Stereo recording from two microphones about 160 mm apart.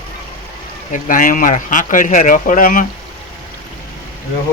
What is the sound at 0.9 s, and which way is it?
Speech, 60° left (ahead or behind).